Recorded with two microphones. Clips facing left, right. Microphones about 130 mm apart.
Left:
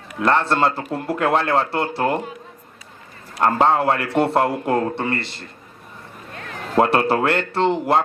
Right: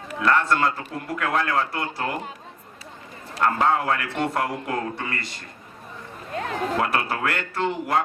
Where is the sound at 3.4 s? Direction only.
30° left (ahead or behind).